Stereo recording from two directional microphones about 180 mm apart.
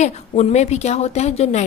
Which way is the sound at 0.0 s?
40° left (ahead or behind).